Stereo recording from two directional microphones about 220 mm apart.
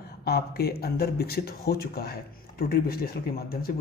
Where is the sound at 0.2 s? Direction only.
45° left (ahead or behind).